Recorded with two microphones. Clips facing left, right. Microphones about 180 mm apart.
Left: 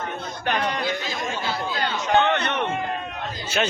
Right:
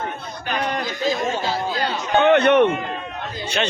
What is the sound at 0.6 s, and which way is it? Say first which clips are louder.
Chatter: right 3 dB; 45° right (ahead or behind).